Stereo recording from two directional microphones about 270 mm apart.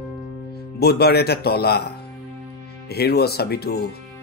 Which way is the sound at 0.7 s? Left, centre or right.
Left.